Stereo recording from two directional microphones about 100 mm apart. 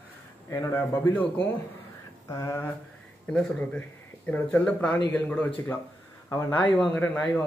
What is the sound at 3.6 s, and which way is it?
Speech, 15° left (ahead or behind).